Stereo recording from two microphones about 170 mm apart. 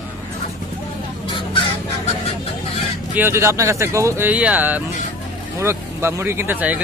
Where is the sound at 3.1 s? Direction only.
15° right (ahead or behind).